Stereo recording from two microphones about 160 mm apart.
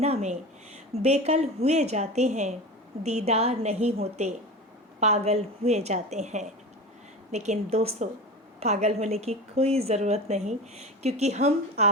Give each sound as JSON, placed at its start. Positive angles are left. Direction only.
{"t": 0.0, "sound": "a woman's voice", "side_deg": -45}